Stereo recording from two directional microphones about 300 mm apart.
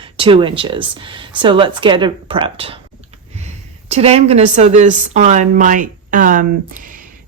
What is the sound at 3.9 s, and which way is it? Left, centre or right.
Speech, centre.